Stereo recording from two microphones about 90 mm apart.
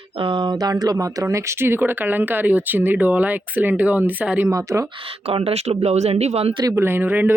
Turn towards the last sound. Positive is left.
turn(degrees=-20)  # may be behind; listen again after turning